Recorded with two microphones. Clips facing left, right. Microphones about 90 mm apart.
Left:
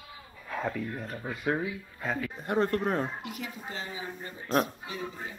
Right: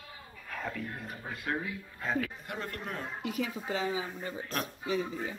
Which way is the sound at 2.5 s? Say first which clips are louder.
Left 11 dB; 35° left (ahead or behind).